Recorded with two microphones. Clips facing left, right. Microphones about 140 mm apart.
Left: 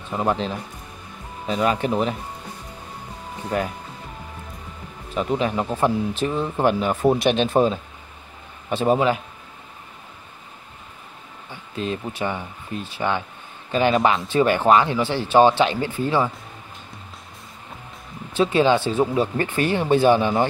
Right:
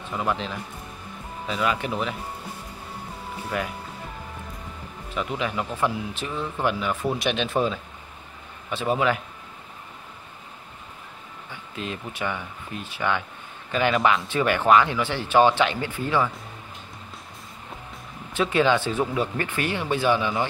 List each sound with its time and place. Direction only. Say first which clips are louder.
0.1 s speech: left 4 dB; 35° left (ahead or behind)
3.5 s speech: left 5 dB; 35° left (ahead or behind)
5.1 s speech: left 5 dB; 35° left (ahead or behind)
11.7 s speech: left 6 dB; 30° left (ahead or behind)
18.3 s speech: left 3 dB; 30° left (ahead or behind)